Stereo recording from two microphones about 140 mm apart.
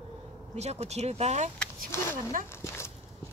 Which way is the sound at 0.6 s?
50° right (ahead or behind).